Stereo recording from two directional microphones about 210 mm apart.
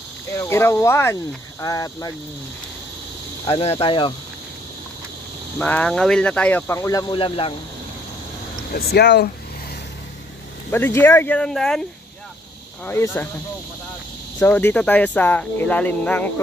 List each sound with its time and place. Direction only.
0.3 s speech: 10° left (ahead or behind)
3.4 s speech: 25° left (ahead or behind)
5.6 s speech: 5° left (ahead or behind); by 7.5 s 25° left (ahead or behind)
8.7 s speech: 50° left (ahead or behind)
10.7 s speech: 10° left (ahead or behind)
12.8 s speech: 10° left (ahead or behind)
14.4 s speech: 10° left (ahead or behind)